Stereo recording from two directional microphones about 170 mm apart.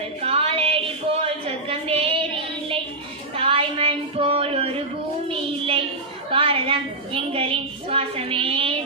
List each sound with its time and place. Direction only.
0.2 s a sound: 35° right (ahead or behind)
1.2 s child singing: 35° right (ahead or behind)
3.3 s female singing: 35° right (ahead or behind)
5.3 s child singing: 35° right (ahead or behind)
6.3 s a woman's voice: 35° right (ahead or behind)